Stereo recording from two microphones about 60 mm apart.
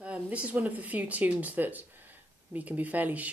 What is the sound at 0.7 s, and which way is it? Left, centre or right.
Speech, right.